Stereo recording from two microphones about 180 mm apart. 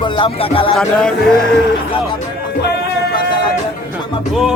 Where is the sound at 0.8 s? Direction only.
5° left (ahead or behind).